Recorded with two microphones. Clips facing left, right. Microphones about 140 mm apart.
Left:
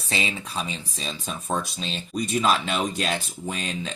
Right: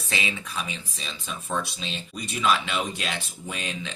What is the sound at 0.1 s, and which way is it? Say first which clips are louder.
Speech: left 2 dB; 35° left (ahead or behind).